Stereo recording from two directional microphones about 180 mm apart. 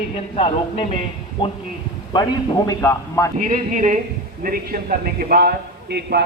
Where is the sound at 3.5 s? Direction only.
45° right (ahead or behind).